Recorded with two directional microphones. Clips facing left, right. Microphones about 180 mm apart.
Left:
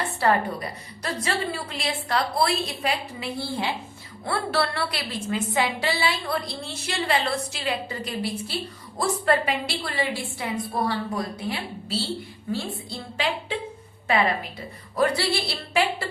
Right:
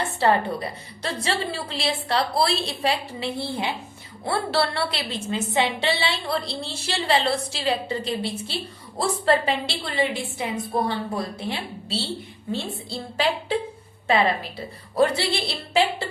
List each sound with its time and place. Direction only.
0.2 s a woman's voice: 25° right (ahead or behind)
14.9 s a woman's voice: 25° right (ahead or behind)